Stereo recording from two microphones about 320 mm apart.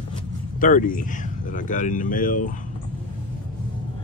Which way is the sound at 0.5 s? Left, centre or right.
Left.